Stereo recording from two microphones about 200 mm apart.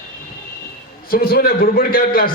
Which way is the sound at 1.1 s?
50° left (ahead or behind).